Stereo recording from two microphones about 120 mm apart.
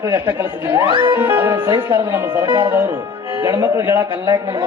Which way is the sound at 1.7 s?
35° right (ahead or behind).